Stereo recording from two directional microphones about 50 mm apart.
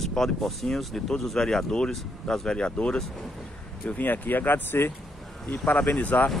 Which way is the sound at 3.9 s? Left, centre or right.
Left.